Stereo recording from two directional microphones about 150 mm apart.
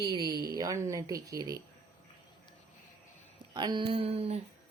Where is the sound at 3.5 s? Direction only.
30° right (ahead or behind).